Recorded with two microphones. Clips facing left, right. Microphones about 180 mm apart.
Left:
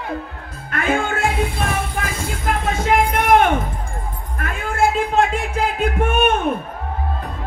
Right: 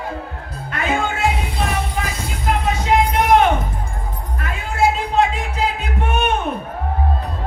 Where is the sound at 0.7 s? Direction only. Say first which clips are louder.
Left 1 dB; 50° left (ahead or behind).